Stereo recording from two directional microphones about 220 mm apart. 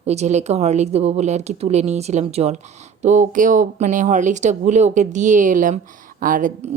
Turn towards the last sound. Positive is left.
turn(degrees=-40)  # may be behind; listen again after turning